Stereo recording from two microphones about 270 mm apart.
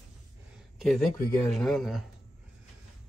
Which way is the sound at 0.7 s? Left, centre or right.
Centre.